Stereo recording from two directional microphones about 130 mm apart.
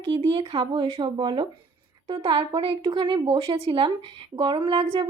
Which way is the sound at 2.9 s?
35° right (ahead or behind).